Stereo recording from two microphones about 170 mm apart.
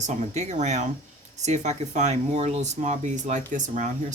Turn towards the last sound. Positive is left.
turn(degrees=-45)  # may be behind; listen again after turning